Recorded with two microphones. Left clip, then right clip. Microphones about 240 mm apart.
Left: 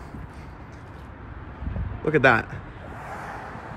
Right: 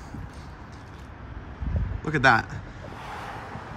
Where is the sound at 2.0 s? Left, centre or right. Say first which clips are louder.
Left 2 dB; centre.